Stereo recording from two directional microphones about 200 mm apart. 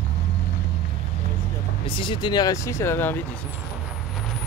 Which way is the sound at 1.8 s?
25° left (ahead or behind).